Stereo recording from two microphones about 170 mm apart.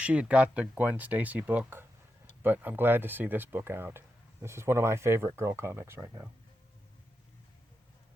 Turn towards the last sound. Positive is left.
turn(degrees=-15)  # may be behind; listen again after turning